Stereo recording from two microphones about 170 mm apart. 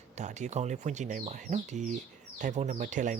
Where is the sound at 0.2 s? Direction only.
45° right (ahead or behind).